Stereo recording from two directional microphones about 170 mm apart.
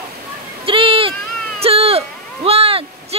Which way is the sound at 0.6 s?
30° right (ahead or behind).